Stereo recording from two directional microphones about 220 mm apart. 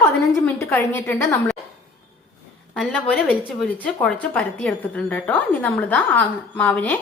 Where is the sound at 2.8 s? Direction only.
5° left (ahead or behind).